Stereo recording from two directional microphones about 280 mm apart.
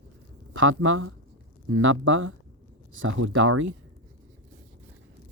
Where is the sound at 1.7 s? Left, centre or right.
Right.